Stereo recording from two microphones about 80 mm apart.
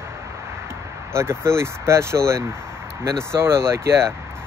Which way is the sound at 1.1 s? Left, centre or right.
Right.